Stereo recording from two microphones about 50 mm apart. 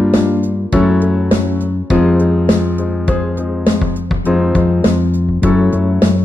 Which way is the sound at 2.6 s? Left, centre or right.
Right.